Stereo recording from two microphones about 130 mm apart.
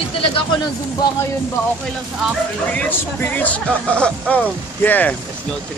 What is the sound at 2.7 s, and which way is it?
Speech, 15° left (ahead or behind).